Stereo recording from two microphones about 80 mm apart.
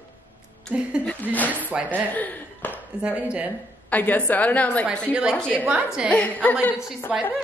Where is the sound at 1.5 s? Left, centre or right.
Centre.